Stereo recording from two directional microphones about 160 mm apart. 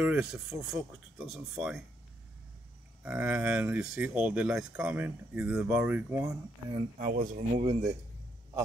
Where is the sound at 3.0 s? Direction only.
5° right (ahead or behind).